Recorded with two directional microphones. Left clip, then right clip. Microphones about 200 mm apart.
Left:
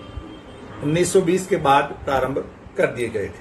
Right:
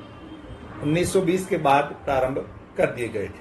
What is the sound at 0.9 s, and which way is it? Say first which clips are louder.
A man's voice: left 4 dB; 15° left (ahead or behind).